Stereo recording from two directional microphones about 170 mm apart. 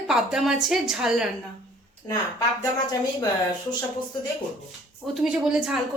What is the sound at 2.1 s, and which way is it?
Speech, 20° left (ahead or behind).